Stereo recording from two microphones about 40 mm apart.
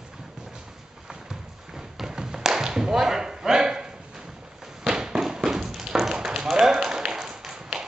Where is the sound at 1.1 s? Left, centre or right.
Centre.